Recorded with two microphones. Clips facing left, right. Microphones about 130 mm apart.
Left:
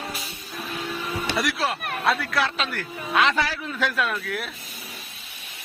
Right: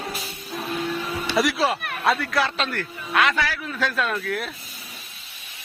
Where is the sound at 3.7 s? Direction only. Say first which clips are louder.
Even; 10° left (ahead or behind).